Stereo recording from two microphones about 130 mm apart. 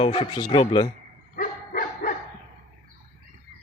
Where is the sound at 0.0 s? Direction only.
45° left (ahead or behind).